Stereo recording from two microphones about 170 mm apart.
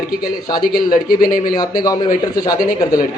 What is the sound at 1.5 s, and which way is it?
Speech, 25° left (ahead or behind).